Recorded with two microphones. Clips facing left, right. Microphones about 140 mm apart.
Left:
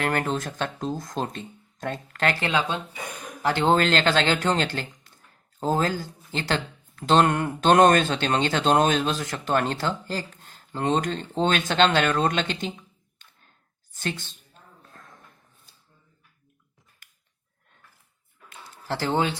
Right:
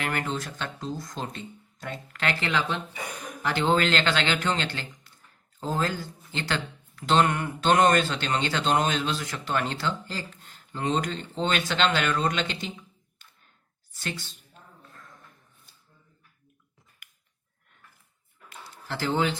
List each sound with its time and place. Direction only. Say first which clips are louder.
0.0 s speech: left 4 dB; 40° left (ahead or behind)
2.4 s speech: left 3 dB; 25° left (ahead or behind)
3.4 s speech: left 3 dB; 35° left (ahead or behind)
5.1 s a sound: left 2 dB; 40° left (ahead or behind)
7.0 s speech: left 3 dB; 45° left (ahead or behind)
14.8 s a sound: left 3 dB; 45° left (ahead or behind)